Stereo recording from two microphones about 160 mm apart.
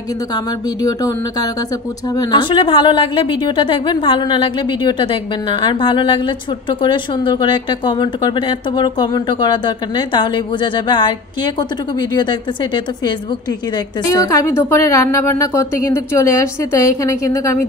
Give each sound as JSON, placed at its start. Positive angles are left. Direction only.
{"t": 0.8, "sound": "a woman's voice", "side_deg": 20}